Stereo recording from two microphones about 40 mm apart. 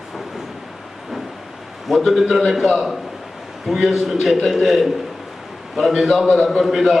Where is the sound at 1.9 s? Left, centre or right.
Centre.